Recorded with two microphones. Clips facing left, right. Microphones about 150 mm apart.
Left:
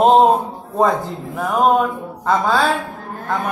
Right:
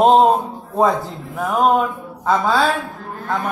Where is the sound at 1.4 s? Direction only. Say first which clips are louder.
Left 1 dB; centre (ahead or behind).